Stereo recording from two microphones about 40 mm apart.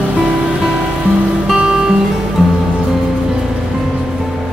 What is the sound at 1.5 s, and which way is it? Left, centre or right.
Music, centre.